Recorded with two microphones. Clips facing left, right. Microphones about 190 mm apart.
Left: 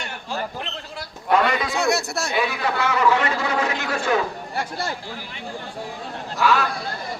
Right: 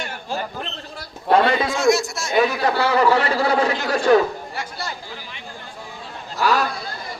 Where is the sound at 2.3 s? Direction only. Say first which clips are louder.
Right 6 dB; 40° right (ahead or behind).